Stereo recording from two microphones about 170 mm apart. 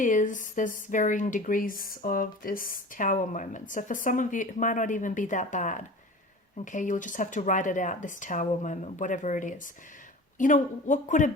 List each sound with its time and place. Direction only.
0.0 s speech: 50° left (ahead or behind)